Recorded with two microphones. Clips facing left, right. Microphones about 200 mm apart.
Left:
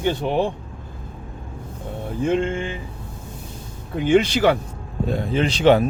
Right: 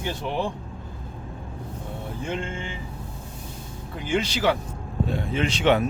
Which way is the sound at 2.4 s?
60° left (ahead or behind).